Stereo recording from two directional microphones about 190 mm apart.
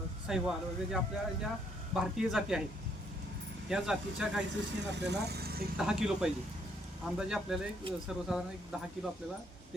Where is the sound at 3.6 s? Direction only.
5° right (ahead or behind).